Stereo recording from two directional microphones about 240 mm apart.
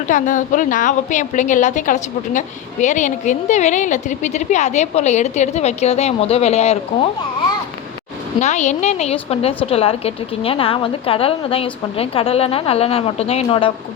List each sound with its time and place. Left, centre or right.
0.1 s a woman's voice: left
8.4 s a woman's voice: left